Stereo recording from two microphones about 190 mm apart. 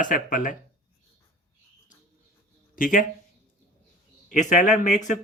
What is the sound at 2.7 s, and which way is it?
Speech, 45° left (ahead or behind).